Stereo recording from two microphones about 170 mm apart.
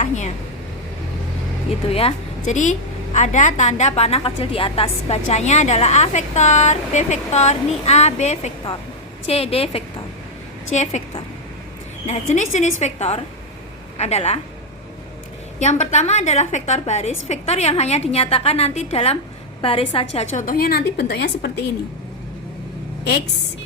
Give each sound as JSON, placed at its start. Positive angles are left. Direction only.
{"t": 0.0, "sound": "a woman's voice", "side_deg": 40}
{"t": 1.9, "sound": "a woman's voice", "side_deg": 35}
{"t": 15.5, "sound": "a woman's voice", "side_deg": 45}
{"t": 20.1, "sound": "a woman's voice", "side_deg": 50}